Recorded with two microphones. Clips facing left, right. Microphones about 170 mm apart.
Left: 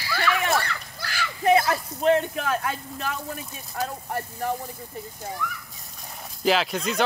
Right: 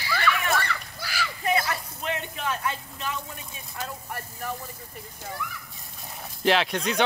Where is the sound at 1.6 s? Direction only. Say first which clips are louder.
Left 6 dB; 50° left (ahead or behind).